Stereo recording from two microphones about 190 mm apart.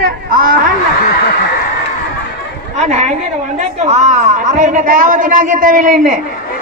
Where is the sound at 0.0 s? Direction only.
50° right (ahead or behind).